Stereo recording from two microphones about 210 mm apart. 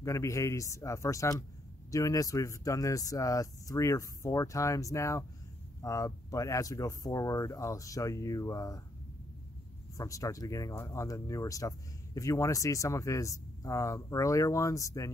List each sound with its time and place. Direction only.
0.0 s speech: 15° left (ahead or behind)
9.9 s speech: 15° left (ahead or behind)